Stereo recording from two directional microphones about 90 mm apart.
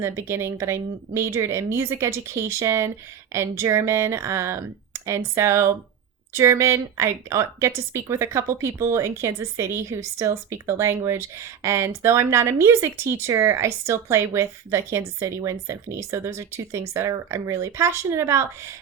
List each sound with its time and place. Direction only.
0.0 s speech: 30° right (ahead or behind)